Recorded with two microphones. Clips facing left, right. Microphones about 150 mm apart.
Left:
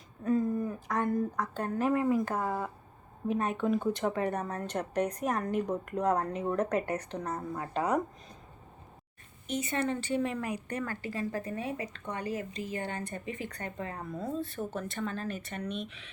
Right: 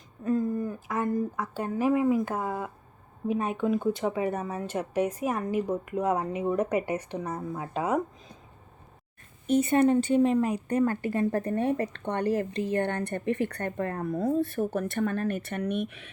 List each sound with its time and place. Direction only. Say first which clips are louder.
0.3 s a woman's voice: right 2 dB; centre (ahead or behind); by 2.7 s 15° right (ahead or behind)
3.9 s a woman's voice: right 2 dB; 5° right (ahead or behind)
9.5 s speech: right 10 dB; 55° right (ahead or behind)